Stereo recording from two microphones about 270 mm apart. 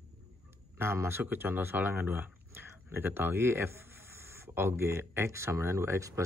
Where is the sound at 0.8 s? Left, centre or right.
Centre.